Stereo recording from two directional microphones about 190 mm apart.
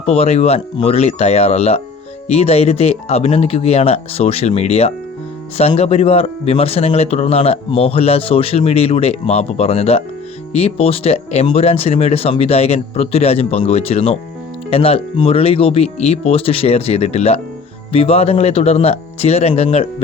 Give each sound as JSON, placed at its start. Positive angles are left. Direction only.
{"t": 0.0, "sound": "speech", "side_deg": 30}